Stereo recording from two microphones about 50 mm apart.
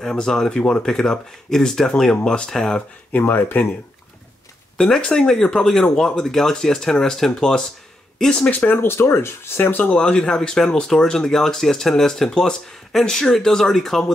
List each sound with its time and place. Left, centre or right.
0.0 s speech: centre
3.1 s speech: left
5.0 s speech: centre
8.5 s speech: left
9.9 s speech: centre